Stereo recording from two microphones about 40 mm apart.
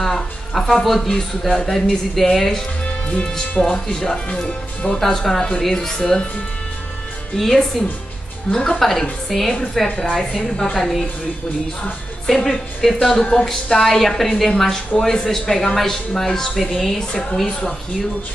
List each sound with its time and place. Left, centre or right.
0.0 s speech: centre
4.3 s speech: left
5.0 s speech: centre
7.3 s speech: centre
8.5 s speech: centre
8.7 s speech: centre
12.4 s speech: centre
14.9 s speech: left; by 17.0 s centre
17.1 s speech: left